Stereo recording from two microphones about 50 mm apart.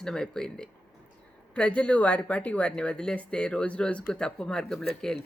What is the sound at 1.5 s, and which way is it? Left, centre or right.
Speech, left.